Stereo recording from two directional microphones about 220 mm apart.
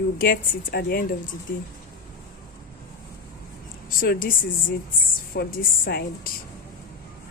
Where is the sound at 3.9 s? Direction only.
40° left (ahead or behind).